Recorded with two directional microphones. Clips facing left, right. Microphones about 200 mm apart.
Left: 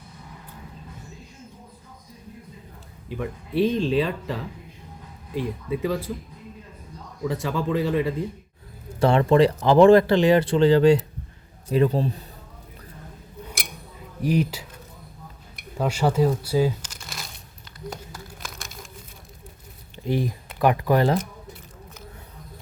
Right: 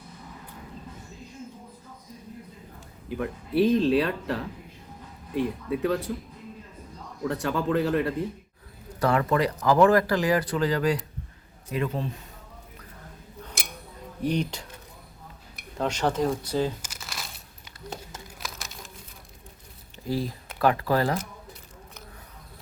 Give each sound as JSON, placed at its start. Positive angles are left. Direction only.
{"t": 3.1, "sound": "speech", "side_deg": 0}
{"t": 7.3, "sound": "speech", "side_deg": 0}
{"t": 9.0, "sound": "a man's voice", "side_deg": 25}
{"t": 14.2, "sound": "speech", "side_deg": 5}
{"t": 15.8, "sound": "speech", "side_deg": 10}
{"t": 16.8, "sound": "crumpling", "side_deg": -5}
{"t": 17.8, "sound": "crumpling", "side_deg": -30}
{"t": 18.3, "sound": "crumpling", "side_deg": 0}
{"t": 20.1, "sound": "speech", "side_deg": 20}